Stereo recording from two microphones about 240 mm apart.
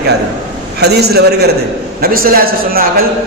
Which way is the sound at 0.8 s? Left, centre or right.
Right.